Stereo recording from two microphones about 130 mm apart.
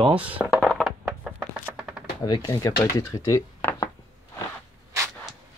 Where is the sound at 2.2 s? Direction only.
35° left (ahead or behind).